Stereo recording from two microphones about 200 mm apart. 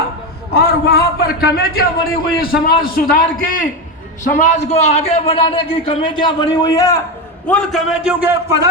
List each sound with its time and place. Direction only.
0.5 s a man's voice: 50° left (ahead or behind); by 7.0 s 15° left (ahead or behind)
7.4 s a man's voice: 5° left (ahead or behind)